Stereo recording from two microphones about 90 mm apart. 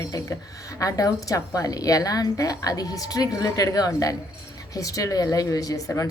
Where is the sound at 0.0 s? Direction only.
40° left (ahead or behind).